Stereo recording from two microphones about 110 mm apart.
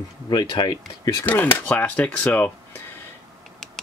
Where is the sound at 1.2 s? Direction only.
15° left (ahead or behind).